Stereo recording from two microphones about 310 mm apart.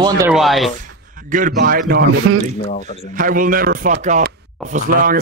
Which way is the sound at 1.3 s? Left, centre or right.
Right.